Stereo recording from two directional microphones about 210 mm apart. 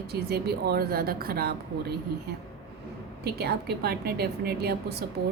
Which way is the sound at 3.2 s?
50° right (ahead or behind).